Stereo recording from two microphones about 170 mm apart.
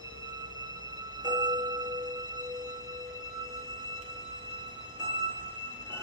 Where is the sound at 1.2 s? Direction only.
25° right (ahead or behind).